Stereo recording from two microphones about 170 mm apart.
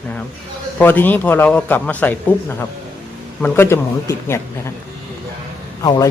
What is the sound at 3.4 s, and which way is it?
A man's voice, 15° left (ahead or behind).